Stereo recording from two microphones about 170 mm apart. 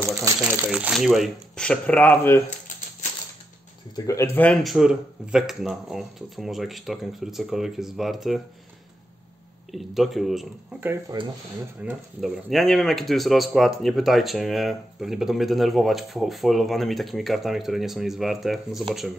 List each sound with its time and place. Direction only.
0.2 s speech: 10° right (ahead or behind); by 2.4 s 10° left (ahead or behind)
3.9 s speech: 20° left (ahead or behind)
4.7 s speech: 5° right (ahead or behind)
9.7 s speech: centre (ahead or behind)
11.1 s speech: 20° right (ahead or behind)
11.8 s speech: 5° right (ahead or behind)